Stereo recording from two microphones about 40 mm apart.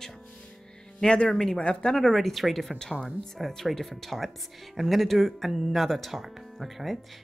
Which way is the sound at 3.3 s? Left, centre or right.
Centre.